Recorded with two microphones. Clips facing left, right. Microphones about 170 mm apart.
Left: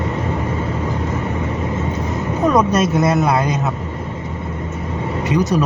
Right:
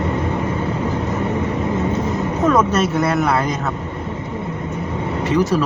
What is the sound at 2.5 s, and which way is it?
Speech, 15° left (ahead or behind).